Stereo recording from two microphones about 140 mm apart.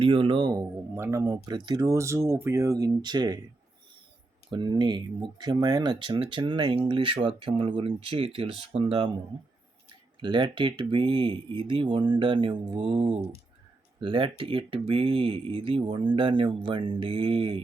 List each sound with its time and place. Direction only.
0.0 s speech: 40° right (ahead or behind)
4.5 s speech: 35° right (ahead or behind)
10.2 s speech: 35° right (ahead or behind)